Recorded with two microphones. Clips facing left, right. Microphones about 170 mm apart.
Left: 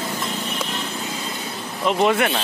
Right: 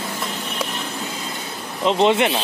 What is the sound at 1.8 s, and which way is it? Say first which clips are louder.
Speech: right 2 dB; 25° right (ahead or behind).